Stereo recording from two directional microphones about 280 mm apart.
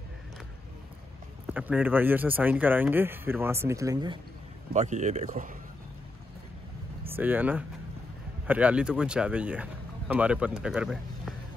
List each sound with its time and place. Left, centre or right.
1.5 s speech: centre
4.7 s speech: right
7.1 s speech: centre